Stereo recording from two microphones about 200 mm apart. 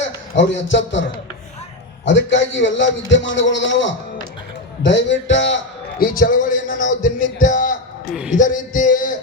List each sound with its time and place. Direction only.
0.0 s a man's voice: 65° left (ahead or behind)
6.1 s speech: 45° left (ahead or behind)